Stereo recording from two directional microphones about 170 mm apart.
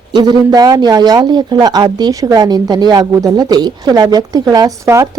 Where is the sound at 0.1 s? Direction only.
25° right (ahead or behind).